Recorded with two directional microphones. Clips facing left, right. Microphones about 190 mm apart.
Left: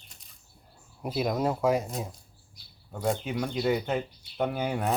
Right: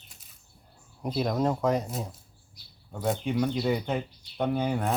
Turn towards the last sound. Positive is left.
turn(degrees=5)  # may be behind; listen again after turning